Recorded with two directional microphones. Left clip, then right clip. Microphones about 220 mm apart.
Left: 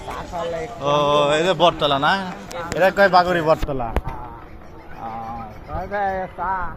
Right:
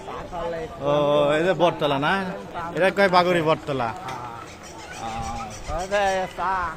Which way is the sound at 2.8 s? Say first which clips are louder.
Left 4 dB; 15° right (ahead or behind).